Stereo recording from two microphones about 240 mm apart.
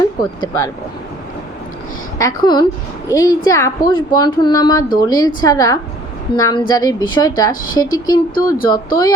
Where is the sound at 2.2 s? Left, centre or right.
Centre.